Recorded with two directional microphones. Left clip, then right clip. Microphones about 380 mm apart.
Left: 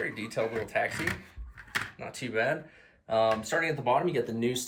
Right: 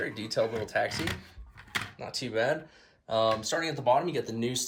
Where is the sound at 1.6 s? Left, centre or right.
Centre.